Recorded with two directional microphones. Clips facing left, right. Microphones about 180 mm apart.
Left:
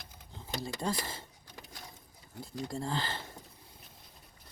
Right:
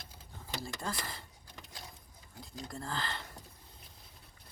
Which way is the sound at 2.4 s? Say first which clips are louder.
Left 6 dB; 25° left (ahead or behind).